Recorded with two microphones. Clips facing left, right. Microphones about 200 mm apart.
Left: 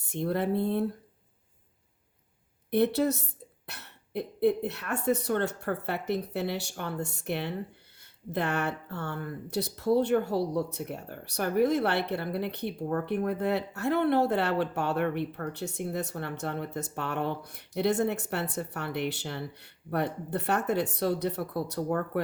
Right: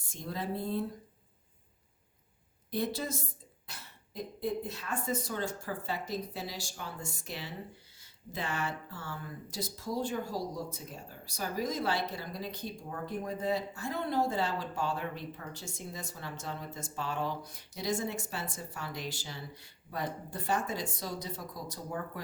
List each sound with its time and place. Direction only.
0.0 s speech: 65° left (ahead or behind)
2.6 s speech: 65° left (ahead or behind)